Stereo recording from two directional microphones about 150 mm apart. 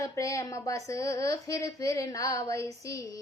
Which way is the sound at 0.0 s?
20° left (ahead or behind).